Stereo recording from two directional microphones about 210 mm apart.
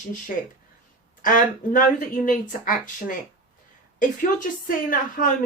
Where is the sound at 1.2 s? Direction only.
40° left (ahead or behind).